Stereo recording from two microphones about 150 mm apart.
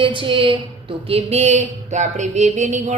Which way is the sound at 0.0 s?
35° right (ahead or behind).